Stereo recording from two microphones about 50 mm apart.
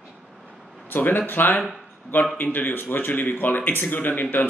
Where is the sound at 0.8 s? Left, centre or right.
Left.